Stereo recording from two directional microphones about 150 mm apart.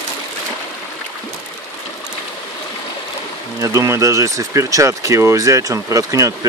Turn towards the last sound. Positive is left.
turn(degrees=-20)  # may be behind; listen again after turning